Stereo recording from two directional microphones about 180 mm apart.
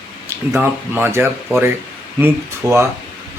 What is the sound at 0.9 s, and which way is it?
Speech, 10° right (ahead or behind).